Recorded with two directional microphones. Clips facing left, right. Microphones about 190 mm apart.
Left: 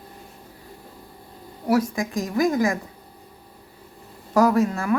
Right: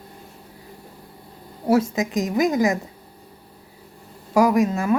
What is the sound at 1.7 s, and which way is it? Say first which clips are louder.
Speech: right 2 dB; 25° right (ahead or behind).